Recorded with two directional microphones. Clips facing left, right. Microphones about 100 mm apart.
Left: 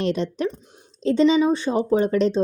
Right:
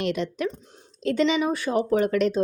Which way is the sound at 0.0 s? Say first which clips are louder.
Left 3 dB; 35° left (ahead or behind).